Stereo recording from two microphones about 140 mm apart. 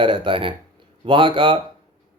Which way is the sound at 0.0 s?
40° right (ahead or behind).